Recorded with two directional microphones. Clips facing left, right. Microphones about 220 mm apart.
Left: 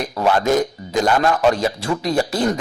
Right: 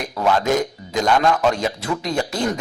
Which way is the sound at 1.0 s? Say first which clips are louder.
Left 1 dB; 5° left (ahead or behind).